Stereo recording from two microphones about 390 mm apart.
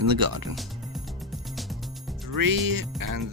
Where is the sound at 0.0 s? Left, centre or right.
Right.